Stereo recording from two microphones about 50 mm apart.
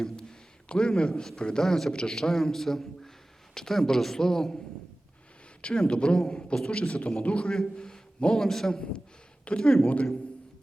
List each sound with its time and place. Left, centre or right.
0.0 s a sound: centre
1.4 s a man's voice: centre
1.6 s a man's voice: centre
5.9 s a man's voice: left
9.4 s a sound: left
9.6 s a man's voice: centre